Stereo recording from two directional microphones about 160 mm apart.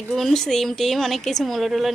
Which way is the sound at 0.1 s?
Centre (ahead or behind).